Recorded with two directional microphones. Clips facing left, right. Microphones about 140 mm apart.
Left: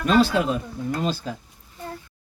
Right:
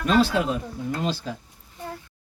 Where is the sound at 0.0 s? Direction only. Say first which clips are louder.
Left 2 dB; 50° left (ahead or behind).